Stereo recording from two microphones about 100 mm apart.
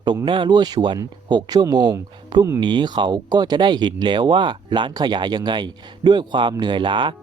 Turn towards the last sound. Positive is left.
turn(degrees=-50)  # may be behind; listen again after turning